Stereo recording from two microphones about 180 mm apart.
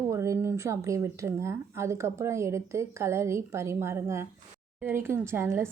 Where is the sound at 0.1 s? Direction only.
15° right (ahead or behind).